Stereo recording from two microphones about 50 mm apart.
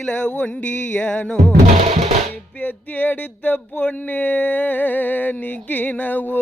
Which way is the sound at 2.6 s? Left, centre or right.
Left.